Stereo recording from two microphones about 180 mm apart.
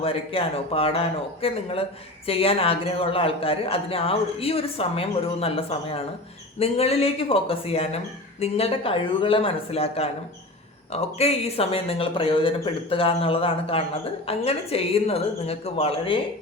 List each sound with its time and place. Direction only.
0.0 s speech: 30° left (ahead or behind)